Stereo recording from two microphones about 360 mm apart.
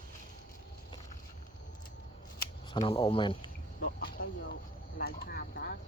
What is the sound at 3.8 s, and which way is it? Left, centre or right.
Speech, left.